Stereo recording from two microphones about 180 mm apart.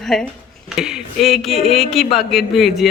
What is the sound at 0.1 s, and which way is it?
Speech, centre (ahead or behind).